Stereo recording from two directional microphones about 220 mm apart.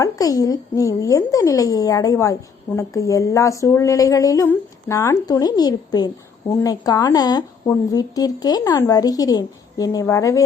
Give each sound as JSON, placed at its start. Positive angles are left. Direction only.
{"t": 0.0, "sound": "speech", "side_deg": 15}